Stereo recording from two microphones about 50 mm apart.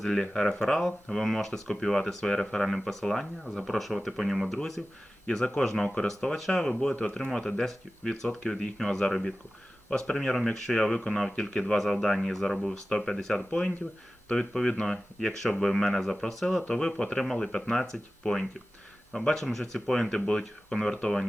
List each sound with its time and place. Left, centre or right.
0.2 s speech: centre
5.2 s speech: centre
16.6 s speech: centre